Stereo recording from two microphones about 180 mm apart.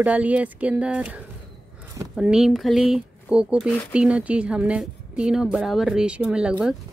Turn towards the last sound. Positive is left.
turn(degrees=-5)  # may be behind; listen again after turning